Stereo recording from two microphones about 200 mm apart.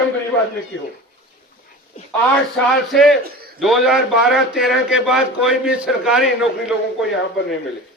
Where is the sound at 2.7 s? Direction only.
Centre (ahead or behind).